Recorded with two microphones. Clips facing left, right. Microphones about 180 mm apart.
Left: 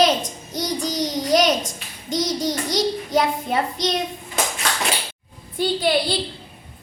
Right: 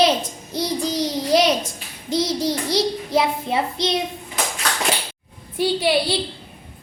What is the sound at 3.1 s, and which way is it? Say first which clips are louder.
Speech: right 1 dB; 5° right (ahead or behind).